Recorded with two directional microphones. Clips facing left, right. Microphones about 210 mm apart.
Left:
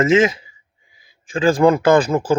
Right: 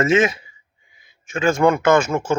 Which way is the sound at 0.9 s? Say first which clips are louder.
Left 1 dB; 25° right (ahead or behind).